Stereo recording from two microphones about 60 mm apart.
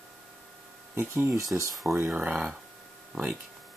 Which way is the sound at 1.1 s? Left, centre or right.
Right.